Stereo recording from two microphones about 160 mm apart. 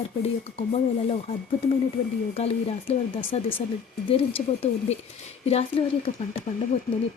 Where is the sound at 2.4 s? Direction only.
40° left (ahead or behind).